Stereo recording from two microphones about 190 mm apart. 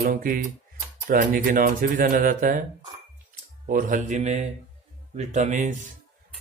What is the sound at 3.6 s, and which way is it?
A man's voice, 45° right (ahead or behind).